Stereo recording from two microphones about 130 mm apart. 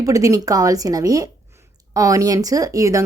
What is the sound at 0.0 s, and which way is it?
Speech, 25° right (ahead or behind).